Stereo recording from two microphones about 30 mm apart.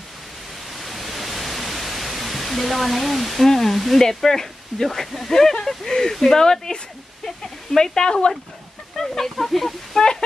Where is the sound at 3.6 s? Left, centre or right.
Centre.